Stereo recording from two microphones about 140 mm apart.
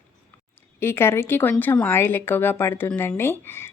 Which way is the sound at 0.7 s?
15° left (ahead or behind).